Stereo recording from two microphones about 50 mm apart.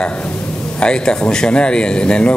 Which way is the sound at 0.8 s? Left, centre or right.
Centre.